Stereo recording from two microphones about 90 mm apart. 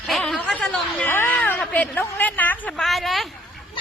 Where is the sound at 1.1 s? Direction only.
20° left (ahead or behind).